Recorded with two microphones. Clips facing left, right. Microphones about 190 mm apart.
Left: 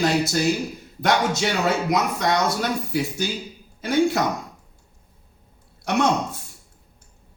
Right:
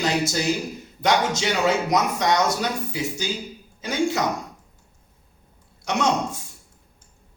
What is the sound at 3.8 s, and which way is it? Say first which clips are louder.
Speech: left 4 dB; 60° left (ahead or behind).